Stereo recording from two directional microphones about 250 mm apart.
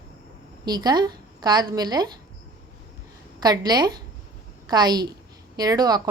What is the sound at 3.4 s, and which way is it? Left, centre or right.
A woman's voice, centre.